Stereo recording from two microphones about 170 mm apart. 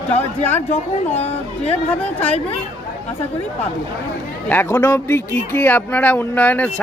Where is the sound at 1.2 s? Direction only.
40° left (ahead or behind).